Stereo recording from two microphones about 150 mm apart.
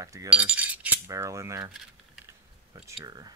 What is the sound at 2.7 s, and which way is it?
Speech, 25° right (ahead or behind).